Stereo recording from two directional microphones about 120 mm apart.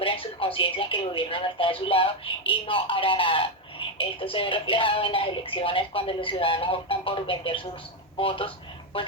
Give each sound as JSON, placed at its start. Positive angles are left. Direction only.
{"t": 0.0, "sound": "speech", "side_deg": 50}